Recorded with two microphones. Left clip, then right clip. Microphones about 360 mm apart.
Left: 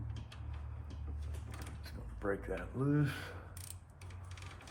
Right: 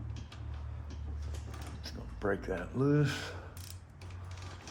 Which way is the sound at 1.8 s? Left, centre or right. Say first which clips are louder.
Right 4 dB; right.